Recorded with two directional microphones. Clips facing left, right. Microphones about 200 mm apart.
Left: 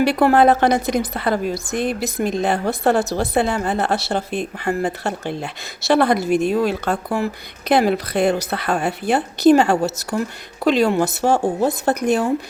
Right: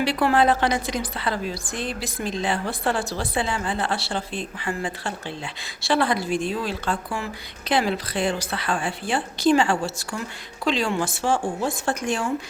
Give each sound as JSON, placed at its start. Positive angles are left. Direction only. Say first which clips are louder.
{"t": 0.0, "sound": "a woman's voice", "louder": "left 6 dB", "side_deg": 50}
{"t": 6.2, "sound": "speech", "louder": "left 7 dB", "side_deg": 10}
{"t": 6.5, "sound": "a woman's voice", "louder": "left 8 dB", "side_deg": 60}
{"t": 6.9, "sound": "speech", "louder": "left 7 dB", "side_deg": 40}
{"t": 7.7, "sound": "a woman's voice", "louder": "left 6 dB", "side_deg": 55}
{"t": 8.3, "sound": "speech", "louder": "left 6 dB", "side_deg": 45}